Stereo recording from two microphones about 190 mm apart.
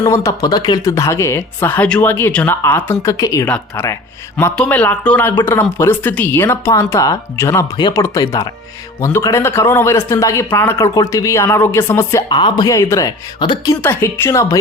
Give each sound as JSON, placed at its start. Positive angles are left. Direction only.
{"t": 0.0, "sound": "speech", "side_deg": 15}